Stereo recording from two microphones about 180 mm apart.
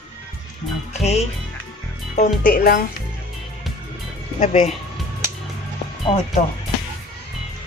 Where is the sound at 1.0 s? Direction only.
35° left (ahead or behind); by 2.8 s 55° left (ahead or behind).